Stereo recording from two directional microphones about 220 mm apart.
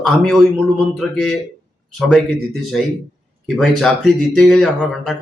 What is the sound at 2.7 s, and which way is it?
Speech, centre (ahead or behind).